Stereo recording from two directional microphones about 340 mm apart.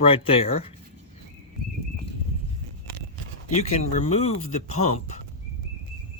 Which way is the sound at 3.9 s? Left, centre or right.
Centre.